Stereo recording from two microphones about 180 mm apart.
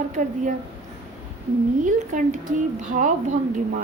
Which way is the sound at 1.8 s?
45° right (ahead or behind).